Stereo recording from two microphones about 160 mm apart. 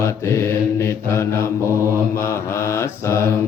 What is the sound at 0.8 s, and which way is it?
Mantra, 15° left (ahead or behind).